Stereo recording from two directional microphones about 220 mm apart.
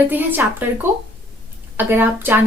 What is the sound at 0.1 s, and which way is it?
A woman's voice, 10° right (ahead or behind).